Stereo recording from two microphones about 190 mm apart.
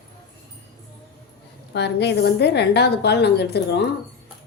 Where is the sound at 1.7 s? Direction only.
65° left (ahead or behind).